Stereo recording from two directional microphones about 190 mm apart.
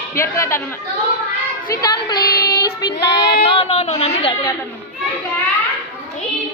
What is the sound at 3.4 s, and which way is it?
Child singing, 30° left (ahead or behind).